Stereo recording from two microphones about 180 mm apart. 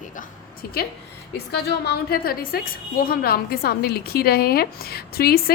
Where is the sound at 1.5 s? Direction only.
60° left (ahead or behind).